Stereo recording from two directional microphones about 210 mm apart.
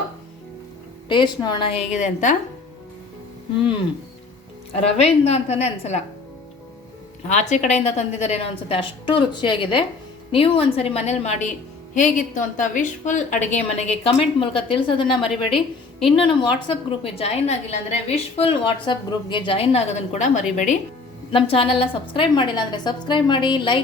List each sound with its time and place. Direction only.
1.0 s a woman's voice: 20° left (ahead or behind)
4.8 s a woman's voice: 30° left (ahead or behind)
7.3 s a woman's voice: 35° left (ahead or behind)